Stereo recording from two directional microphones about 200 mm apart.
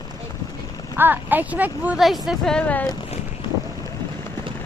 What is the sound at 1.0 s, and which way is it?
Speech, 10° right (ahead or behind).